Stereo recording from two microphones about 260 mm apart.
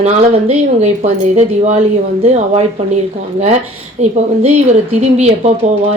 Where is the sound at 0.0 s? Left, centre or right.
Right.